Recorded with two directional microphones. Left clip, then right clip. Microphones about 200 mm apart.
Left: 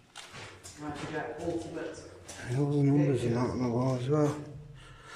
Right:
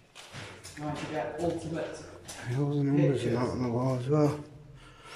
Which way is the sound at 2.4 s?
Centre (ahead or behind).